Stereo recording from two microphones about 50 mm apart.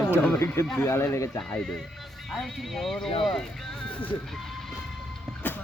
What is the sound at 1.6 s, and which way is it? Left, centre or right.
Speech, centre.